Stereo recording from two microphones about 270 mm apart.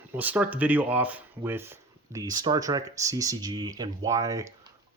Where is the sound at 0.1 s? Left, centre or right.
Centre.